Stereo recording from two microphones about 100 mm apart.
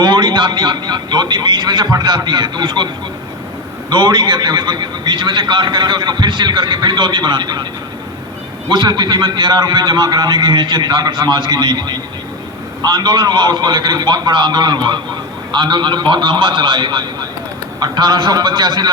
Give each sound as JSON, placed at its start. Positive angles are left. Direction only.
{"t": 0.0, "sound": "a man's voice", "side_deg": -45}
{"t": 8.7, "sound": "a man's voice", "side_deg": -45}